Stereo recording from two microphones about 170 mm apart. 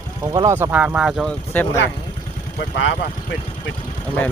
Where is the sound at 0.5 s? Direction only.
10° right (ahead or behind).